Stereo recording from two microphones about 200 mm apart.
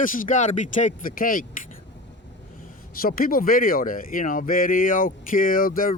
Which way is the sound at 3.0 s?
45° left (ahead or behind).